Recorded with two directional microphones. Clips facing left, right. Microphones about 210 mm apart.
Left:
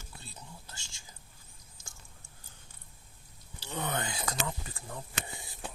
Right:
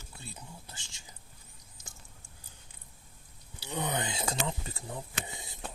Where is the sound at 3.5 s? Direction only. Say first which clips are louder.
Right 1 dB; 15° right (ahead or behind).